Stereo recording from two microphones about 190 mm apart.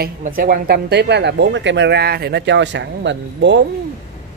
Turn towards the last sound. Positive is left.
turn(degrees=-70)  # may be behind; listen again after turning